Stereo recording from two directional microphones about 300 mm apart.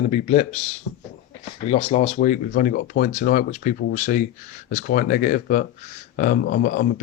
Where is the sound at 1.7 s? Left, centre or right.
Left.